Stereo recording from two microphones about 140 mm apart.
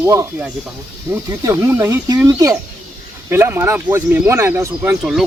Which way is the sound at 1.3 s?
20° right (ahead or behind).